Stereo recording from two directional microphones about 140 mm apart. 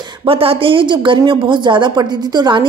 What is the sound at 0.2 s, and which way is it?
A woman's voice, 40° right (ahead or behind).